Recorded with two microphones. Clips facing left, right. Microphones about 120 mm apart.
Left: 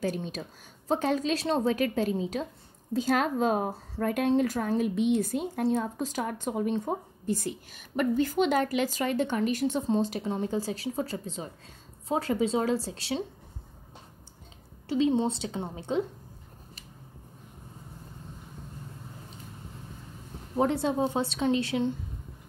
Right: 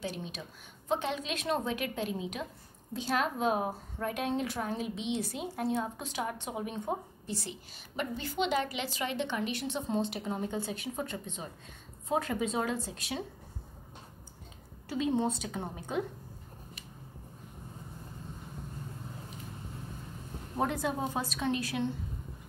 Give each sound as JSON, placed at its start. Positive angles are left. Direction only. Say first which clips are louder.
{"t": 0.0, "sound": "a woman's voice", "louder": "left 7 dB", "side_deg": 45}
{"t": 4.0, "sound": "speech", "louder": "left 6 dB", "side_deg": 55}
{"t": 4.3, "sound": "a woman's voice", "louder": "left 8 dB", "side_deg": 45}
{"t": 14.9, "sound": "a woman's voice", "louder": "left 5 dB", "side_deg": 20}
{"t": 20.5, "sound": "a woman's voice", "louder": "left 6 dB", "side_deg": 25}